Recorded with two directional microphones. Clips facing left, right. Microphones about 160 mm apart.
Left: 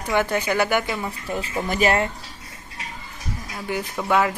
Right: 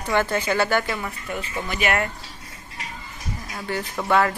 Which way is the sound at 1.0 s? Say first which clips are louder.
Left 2 dB; 35° left (ahead or behind).